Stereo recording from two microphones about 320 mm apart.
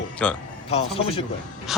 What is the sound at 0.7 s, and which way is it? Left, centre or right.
Speech, centre.